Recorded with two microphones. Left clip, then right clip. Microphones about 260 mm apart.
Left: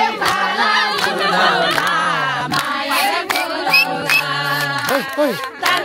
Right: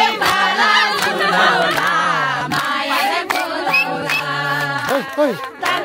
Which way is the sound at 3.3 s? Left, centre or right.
Centre.